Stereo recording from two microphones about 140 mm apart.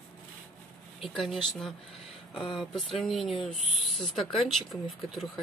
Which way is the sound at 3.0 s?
Centre (ahead or behind).